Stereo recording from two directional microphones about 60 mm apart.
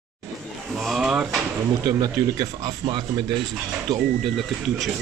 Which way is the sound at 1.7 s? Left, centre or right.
Right.